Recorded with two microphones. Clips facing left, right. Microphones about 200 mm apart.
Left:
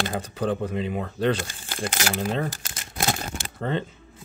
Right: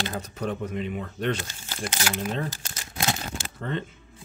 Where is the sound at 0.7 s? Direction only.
90° left.